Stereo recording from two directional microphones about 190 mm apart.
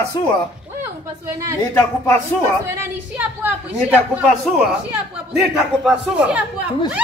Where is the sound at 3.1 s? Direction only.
10° right (ahead or behind).